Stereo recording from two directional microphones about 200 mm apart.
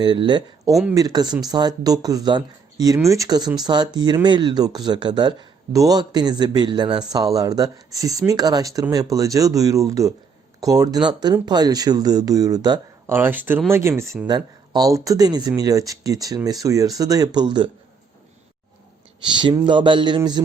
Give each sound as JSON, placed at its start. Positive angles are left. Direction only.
{"t": 0.0, "sound": "speech", "side_deg": -25}
{"t": 19.3, "sound": "speech", "side_deg": -25}